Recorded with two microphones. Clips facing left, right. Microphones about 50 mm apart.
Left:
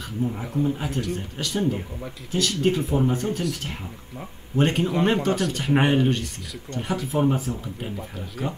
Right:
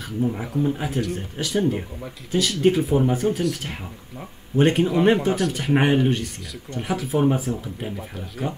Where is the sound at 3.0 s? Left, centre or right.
Centre.